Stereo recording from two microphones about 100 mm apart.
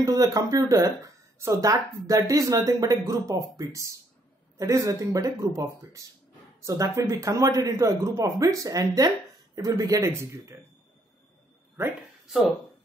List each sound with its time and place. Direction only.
0.0 s speech: 35° right (ahead or behind)